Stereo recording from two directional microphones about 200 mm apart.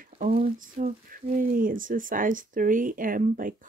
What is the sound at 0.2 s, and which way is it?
Speech, 40° right (ahead or behind).